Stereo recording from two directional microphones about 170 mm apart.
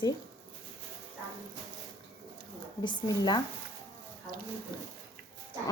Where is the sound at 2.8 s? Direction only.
25° left (ahead or behind).